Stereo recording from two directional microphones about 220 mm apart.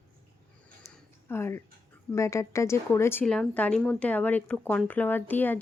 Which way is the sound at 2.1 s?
15° left (ahead or behind).